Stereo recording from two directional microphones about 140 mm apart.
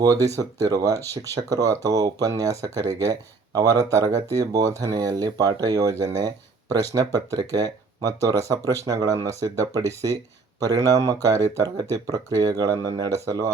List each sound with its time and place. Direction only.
0.0 s speech: 25° right (ahead or behind)